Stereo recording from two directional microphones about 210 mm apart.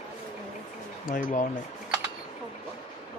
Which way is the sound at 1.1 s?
40° left (ahead or behind).